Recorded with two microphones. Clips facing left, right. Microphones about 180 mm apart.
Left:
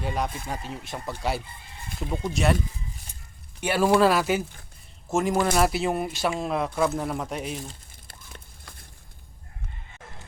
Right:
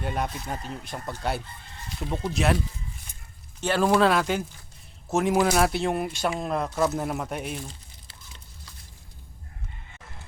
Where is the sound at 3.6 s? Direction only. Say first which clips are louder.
Left 1 dB; 10° left (ahead or behind).